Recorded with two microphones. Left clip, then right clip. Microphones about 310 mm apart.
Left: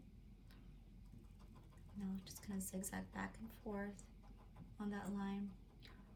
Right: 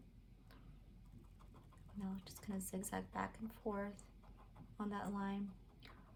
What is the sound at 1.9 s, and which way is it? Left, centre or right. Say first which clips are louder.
A woman's voice: right 1 dB; centre.